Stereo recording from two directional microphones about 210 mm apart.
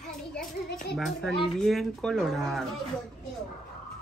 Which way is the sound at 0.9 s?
Centre (ahead or behind).